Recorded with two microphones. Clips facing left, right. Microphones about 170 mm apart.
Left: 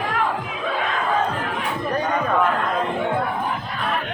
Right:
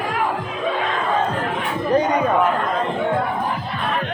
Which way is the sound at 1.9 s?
20° right (ahead or behind).